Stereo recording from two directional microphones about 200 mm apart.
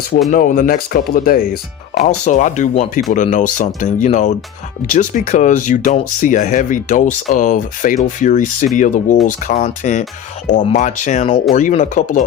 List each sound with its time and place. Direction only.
0.3 s speech: 45° left (ahead or behind)
2.0 s speech: 35° left (ahead or behind)